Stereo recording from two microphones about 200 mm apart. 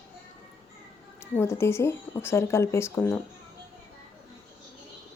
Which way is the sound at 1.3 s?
10° left (ahead or behind).